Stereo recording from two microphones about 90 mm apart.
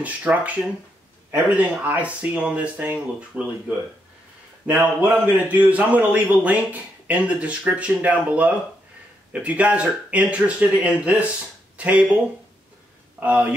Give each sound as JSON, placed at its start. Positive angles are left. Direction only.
{"t": 0.0, "sound": "a man's voice", "side_deg": -15}
{"t": 13.2, "sound": "a man's voice", "side_deg": -15}